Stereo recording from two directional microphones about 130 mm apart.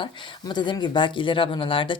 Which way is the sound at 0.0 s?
40° left (ahead or behind).